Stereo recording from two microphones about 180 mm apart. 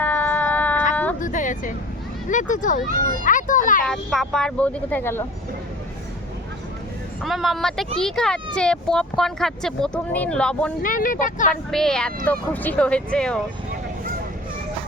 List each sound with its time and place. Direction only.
0.0 s a sound: 10° left (ahead or behind)
1.2 s a sound: 45° left (ahead or behind)
2.3 s a child's voice: 45° left (ahead or behind)
3.8 s speech: centre (ahead or behind)
7.2 s speech: centre (ahead or behind)
10.8 s speech: 50° left (ahead or behind)
11.7 s speech: 5° left (ahead or behind)